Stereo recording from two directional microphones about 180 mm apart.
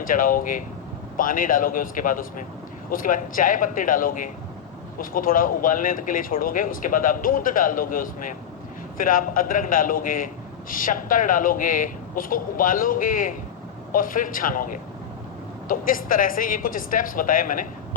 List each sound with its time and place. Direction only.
0.0 s speech: 50° left (ahead or behind)